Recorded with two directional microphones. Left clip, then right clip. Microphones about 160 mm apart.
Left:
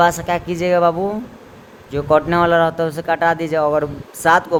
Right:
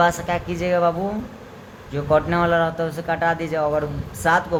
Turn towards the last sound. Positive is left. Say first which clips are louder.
# left 5 dB
turn(degrees=40)  # may be behind; listen again after turning